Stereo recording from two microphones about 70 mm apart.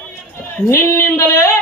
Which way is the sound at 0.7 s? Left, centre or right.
Left.